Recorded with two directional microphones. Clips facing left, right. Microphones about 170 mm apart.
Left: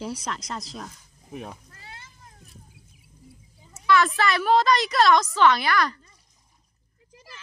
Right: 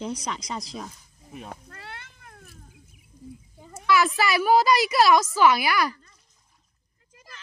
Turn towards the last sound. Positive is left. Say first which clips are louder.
# even
turn(degrees=-10)  # may be behind; listen again after turning